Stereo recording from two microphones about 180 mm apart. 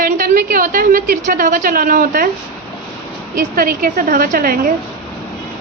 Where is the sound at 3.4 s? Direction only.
50° right (ahead or behind).